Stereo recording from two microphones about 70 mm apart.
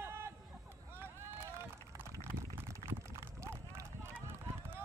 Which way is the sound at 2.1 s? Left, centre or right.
Right.